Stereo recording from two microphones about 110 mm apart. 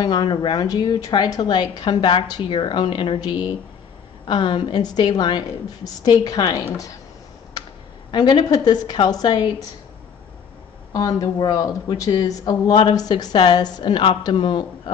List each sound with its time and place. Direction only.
0.0 s speech: 40° left (ahead or behind)
0.7 s speech: 35° left (ahead or behind)
1.1 s a woman's voice: 45° left (ahead or behind)
8.1 s a woman's voice: 45° left (ahead or behind)
8.5 s a woman's voice: 35° left (ahead or behind)
10.9 s a woman's voice: 35° left (ahead or behind)